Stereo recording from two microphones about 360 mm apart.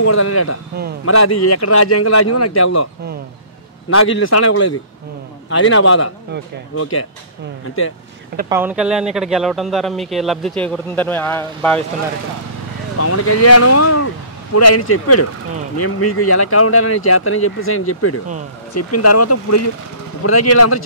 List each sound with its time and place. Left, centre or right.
0.0 s speech: left
3.9 s speech: left
8.5 s speech: centre
13.0 s speech: left